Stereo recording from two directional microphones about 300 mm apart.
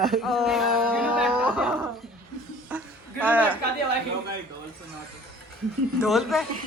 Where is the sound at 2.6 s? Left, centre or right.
Centre.